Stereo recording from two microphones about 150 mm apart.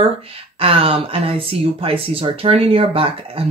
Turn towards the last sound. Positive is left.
turn(degrees=-40)  # may be behind; listen again after turning